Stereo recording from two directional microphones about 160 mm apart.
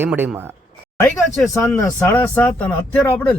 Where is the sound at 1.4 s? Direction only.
Centre (ahead or behind).